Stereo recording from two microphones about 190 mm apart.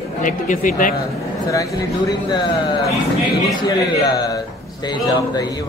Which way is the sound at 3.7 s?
20° left (ahead or behind).